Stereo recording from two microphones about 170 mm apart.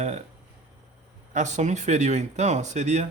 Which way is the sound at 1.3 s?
45° right (ahead or behind).